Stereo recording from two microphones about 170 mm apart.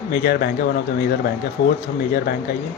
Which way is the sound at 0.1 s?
65° left (ahead or behind).